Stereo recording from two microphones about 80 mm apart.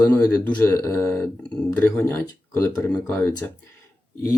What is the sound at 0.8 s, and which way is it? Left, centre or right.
Speech, left.